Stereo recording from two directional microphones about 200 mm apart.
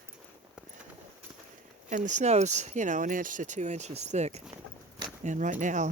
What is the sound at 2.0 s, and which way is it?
Speech, 35° right (ahead or behind).